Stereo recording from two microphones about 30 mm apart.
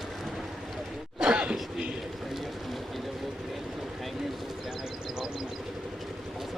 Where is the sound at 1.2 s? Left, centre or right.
Right.